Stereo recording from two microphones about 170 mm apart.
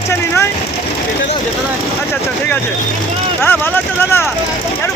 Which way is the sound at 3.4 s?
10° left (ahead or behind).